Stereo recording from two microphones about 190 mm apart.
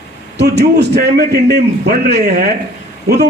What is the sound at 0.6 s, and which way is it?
A man's voice, 55° right (ahead or behind).